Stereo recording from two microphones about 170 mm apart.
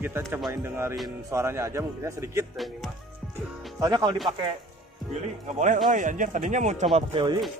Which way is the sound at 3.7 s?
25° right (ahead or behind).